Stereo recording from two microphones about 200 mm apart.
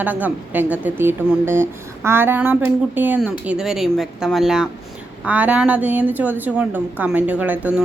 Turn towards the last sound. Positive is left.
turn(degrees=-10)  # may be behind; listen again after turning